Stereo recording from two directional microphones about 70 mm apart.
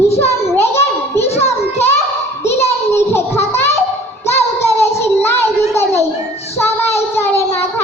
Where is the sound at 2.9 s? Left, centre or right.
Left.